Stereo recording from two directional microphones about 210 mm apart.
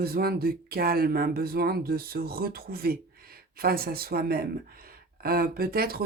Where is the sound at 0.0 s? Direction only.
45° right (ahead or behind).